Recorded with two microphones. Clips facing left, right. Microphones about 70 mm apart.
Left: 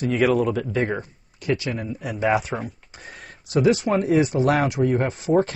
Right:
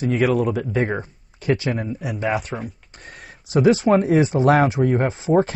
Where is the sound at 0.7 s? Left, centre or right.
Centre.